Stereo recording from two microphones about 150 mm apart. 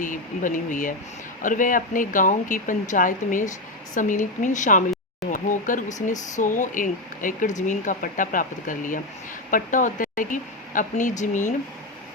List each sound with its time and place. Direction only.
0.0 s speech: 60° left (ahead or behind)